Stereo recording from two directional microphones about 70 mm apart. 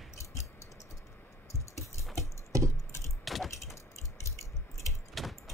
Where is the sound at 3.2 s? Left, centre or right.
Centre.